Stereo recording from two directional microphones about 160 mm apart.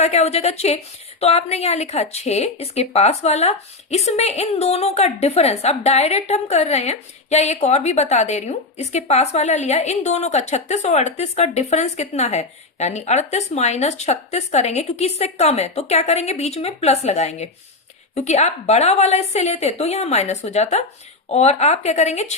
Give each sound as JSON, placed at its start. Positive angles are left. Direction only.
{"t": 0.0, "sound": "speech", "side_deg": 45}